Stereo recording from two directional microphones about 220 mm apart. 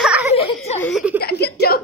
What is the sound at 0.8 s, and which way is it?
Speech, 5° right (ahead or behind).